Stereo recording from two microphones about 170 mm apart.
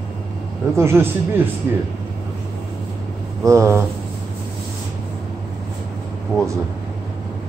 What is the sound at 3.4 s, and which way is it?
Speech, 15° right (ahead or behind).